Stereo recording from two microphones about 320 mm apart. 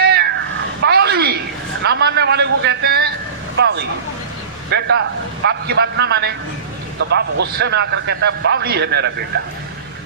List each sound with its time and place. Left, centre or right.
0.0 s meow: right
0.9 s a sound: right
3.6 s a man's voice: right